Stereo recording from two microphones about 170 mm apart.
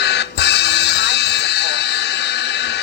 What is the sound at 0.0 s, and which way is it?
Music, 85° left.